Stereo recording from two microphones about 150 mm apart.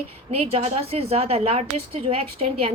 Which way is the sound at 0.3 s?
45° right (ahead or behind).